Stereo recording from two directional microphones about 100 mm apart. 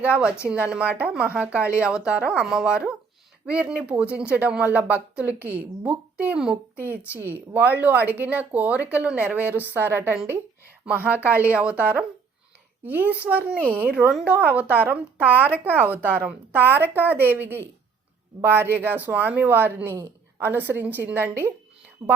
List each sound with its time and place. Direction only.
0.4 s a woman's voice: 15° right (ahead or behind)
22.0 s a woman's voice: 40° right (ahead or behind)